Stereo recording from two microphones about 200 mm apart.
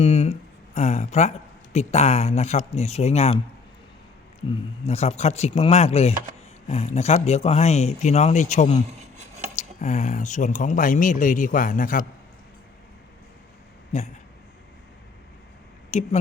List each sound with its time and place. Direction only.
0.0 s speech: 30° left (ahead or behind)
4.9 s speech: 35° left (ahead or behind)
13.9 s speech: 35° left (ahead or behind)
15.9 s speech: 35° left (ahead or behind)